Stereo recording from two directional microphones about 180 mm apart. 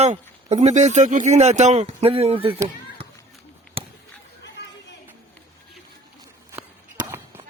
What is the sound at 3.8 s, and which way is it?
Chop, 30° right (ahead or behind).